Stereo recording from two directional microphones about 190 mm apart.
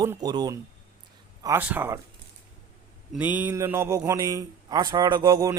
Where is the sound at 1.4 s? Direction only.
10° right (ahead or behind).